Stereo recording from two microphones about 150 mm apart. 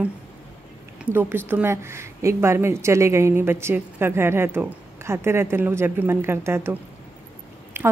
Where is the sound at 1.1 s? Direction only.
10° right (ahead or behind).